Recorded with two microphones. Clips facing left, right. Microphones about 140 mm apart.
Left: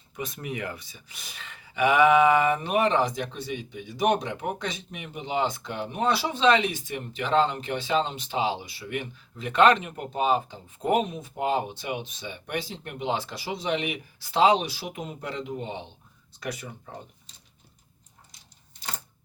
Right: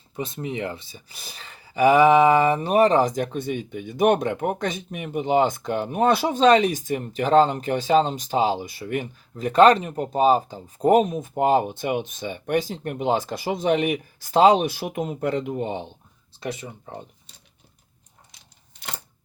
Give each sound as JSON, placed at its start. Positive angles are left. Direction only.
{"t": 0.2, "sound": "speech", "side_deg": -25}
{"t": 16.4, "sound": "speech", "side_deg": -25}